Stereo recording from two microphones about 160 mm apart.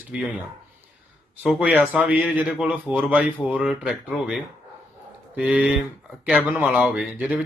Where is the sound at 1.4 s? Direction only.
5° right (ahead or behind).